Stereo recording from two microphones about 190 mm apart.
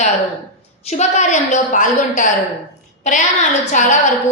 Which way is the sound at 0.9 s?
35° left (ahead or behind).